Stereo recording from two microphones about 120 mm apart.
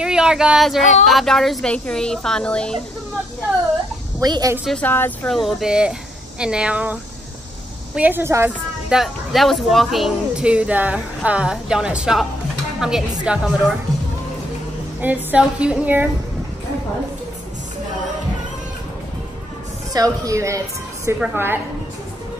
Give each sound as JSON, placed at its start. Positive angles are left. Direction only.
{"t": 0.0, "sound": "speech", "side_deg": -5}
{"t": 4.2, "sound": "a woman's voice", "side_deg": -30}
{"t": 4.8, "sound": "speech", "side_deg": 15}
{"t": 5.3, "sound": "a woman's voice", "side_deg": 0}
{"t": 8.8, "sound": "a woman's voice", "side_deg": 0}
{"t": 15.0, "sound": "a woman's voice", "side_deg": -10}
{"t": 19.9, "sound": "a woman's voice", "side_deg": -30}